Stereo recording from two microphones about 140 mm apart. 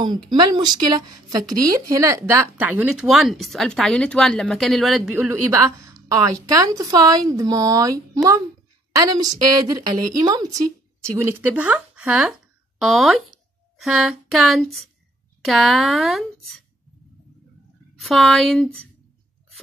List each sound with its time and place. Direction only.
0.0 s speech: 35° right (ahead or behind); by 5.0 s centre (ahead or behind)
5.3 s a woman's voice: 20° right (ahead or behind); by 16.6 s centre (ahead or behind)
17.9 s speech: centre (ahead or behind)